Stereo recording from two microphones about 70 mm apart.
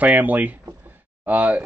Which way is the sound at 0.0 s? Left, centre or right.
Right.